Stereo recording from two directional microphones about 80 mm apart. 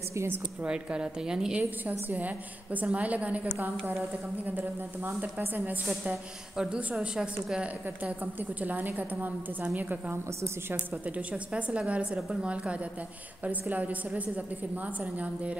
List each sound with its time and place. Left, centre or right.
0.1 s a woman's voice: right
0.6 s a woman's voice: centre
1.6 s a woman's voice: right
4.5 s a woman's voice: right
6.5 s a woman's voice: centre
7.6 s a woman's voice: centre